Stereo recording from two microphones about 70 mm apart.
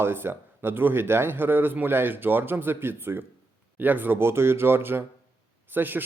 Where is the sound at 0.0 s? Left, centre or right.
Right.